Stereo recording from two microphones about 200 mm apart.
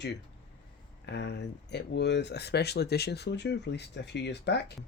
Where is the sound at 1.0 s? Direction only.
55° left (ahead or behind).